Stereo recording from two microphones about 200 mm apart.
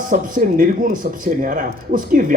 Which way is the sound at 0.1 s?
40° right (ahead or behind).